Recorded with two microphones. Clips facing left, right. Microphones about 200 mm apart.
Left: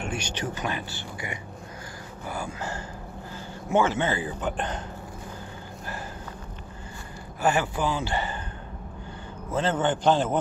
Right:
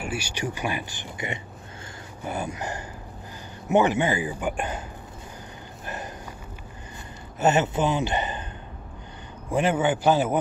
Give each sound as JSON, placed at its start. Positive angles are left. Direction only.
{"t": 0.0, "sound": "speech", "side_deg": -10}
{"t": 7.3, "sound": "speech", "side_deg": -20}
{"t": 9.5, "sound": "speech", "side_deg": -15}